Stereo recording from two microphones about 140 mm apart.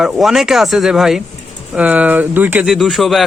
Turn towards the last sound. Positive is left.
turn(degrees=0)  # may be behind; listen again after turning